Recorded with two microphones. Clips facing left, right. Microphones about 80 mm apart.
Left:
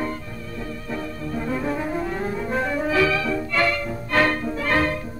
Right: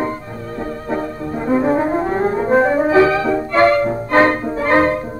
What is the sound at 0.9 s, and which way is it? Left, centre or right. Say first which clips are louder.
Brass instrument: right 7 dB; right.